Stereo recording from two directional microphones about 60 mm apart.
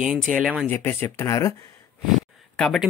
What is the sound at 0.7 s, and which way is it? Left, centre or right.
Speech, left.